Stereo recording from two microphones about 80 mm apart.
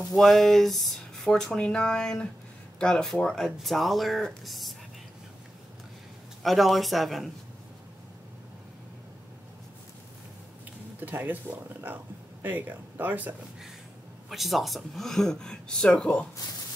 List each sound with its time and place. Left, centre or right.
0.1 s a woman's voice: centre
6.4 s speech: centre
11.0 s speech: right
14.3 s speech: centre